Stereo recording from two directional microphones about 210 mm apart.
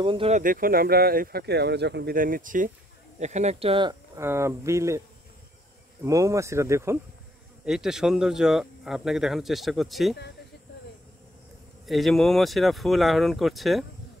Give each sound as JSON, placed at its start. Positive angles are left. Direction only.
{"t": 0.0, "sound": "speech", "side_deg": -25}
{"t": 0.4, "sound": "speech", "side_deg": -40}
{"t": 4.2, "sound": "speech", "side_deg": -10}
{"t": 6.0, "sound": "speech", "side_deg": -15}
{"t": 7.6, "sound": "speech", "side_deg": 0}
{"t": 11.8, "sound": "speech", "side_deg": 0}